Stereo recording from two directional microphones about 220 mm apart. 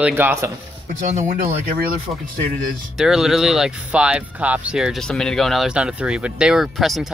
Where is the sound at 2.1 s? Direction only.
5° right (ahead or behind).